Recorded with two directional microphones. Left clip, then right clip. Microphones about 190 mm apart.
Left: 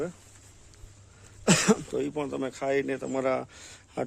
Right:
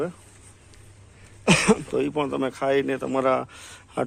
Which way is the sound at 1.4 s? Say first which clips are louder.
Right 4 dB; 30° left (ahead or behind).